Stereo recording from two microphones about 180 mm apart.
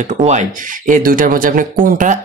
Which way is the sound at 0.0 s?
40° right (ahead or behind).